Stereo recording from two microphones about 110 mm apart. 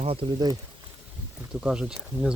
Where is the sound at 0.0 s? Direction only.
60° right (ahead or behind).